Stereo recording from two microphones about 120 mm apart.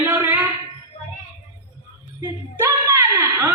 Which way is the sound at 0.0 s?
20° right (ahead or behind).